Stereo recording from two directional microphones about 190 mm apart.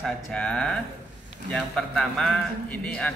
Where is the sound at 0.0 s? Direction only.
5° left (ahead or behind).